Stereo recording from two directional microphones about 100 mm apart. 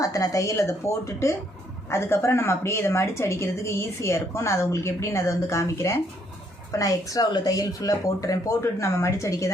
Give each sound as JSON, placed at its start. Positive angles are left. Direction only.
{"t": 0.0, "sound": "speech", "side_deg": 35}